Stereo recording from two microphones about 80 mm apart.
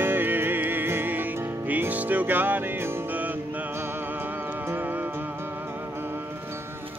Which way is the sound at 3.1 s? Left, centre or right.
Right.